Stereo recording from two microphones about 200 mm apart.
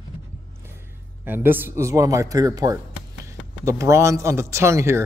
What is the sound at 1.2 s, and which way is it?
Speech, 10° right (ahead or behind).